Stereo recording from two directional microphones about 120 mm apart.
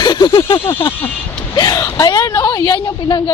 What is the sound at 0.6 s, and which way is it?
Speech, 20° left (ahead or behind).